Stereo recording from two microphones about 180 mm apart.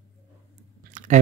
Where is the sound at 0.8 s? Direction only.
45° right (ahead or behind).